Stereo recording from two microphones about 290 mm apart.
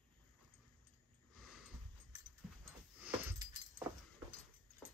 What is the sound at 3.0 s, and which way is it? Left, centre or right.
Dog, centre.